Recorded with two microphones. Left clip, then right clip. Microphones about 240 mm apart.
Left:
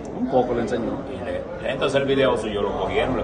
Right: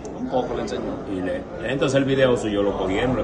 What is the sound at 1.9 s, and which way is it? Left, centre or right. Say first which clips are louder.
A man's voice: right 1 dB; right.